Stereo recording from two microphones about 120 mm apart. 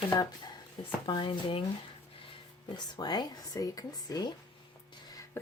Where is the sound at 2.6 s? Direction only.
35° left (ahead or behind).